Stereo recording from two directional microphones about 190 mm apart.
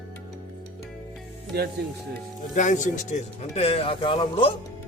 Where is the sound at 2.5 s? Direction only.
40° left (ahead or behind).